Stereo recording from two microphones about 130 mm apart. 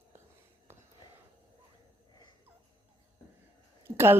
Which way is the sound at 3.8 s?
15° right (ahead or behind).